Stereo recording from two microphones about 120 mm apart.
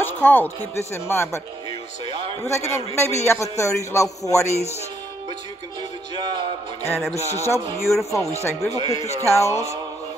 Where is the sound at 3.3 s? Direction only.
25° left (ahead or behind).